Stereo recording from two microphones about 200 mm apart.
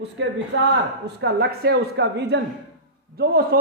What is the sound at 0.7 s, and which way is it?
A man's voice, 55° right (ahead or behind).